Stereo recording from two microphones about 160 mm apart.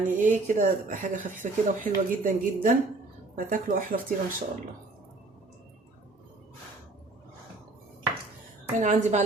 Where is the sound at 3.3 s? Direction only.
60° right (ahead or behind).